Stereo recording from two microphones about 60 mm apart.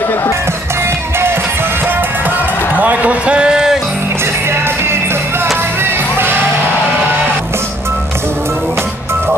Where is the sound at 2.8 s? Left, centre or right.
Right.